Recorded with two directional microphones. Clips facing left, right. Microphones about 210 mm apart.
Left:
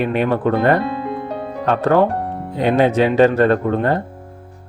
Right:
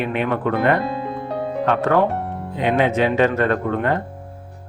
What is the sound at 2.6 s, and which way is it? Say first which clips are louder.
Speech: left 3 dB; 35° left (ahead or behind).